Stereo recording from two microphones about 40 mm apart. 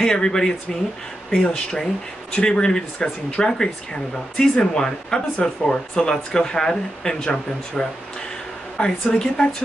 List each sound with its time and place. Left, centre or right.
0.0 s speech: centre